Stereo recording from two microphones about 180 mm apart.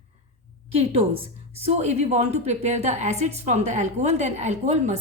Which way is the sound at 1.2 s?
35° right (ahead or behind).